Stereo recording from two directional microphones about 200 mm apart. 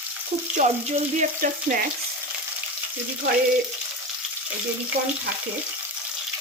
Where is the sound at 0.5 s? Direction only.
35° right (ahead or behind).